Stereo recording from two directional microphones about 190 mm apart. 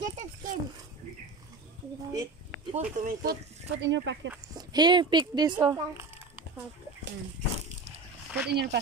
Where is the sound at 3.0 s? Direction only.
40° right (ahead or behind).